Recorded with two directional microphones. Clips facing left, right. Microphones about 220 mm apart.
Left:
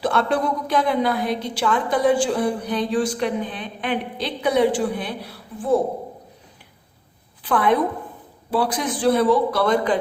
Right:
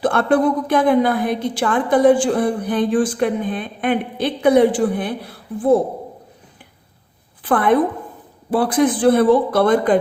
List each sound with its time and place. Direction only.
0.0 s a woman's voice: 50° right (ahead or behind)
7.4 s a woman's voice: 50° right (ahead or behind)